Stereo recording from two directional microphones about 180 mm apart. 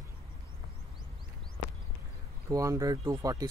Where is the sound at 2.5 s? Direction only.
20° right (ahead or behind).